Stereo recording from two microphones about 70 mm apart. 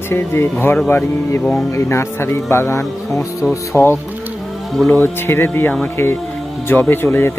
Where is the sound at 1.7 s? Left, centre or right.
Left.